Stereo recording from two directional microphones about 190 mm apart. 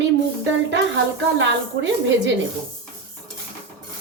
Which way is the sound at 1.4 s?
75° right (ahead or behind).